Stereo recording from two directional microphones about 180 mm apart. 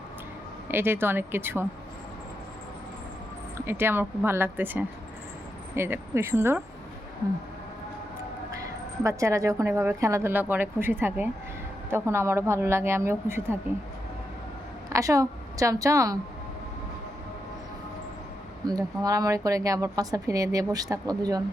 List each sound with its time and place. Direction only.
0.7 s a woman's voice: 10° right (ahead or behind)
3.7 s a woman's voice: 15° right (ahead or behind)
9.0 s a woman's voice: 15° right (ahead or behind)
14.8 s a woman's voice: 20° right (ahead or behind)
18.6 s speech: 20° right (ahead or behind)